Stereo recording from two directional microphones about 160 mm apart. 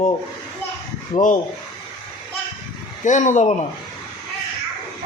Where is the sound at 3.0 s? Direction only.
50° left (ahead or behind).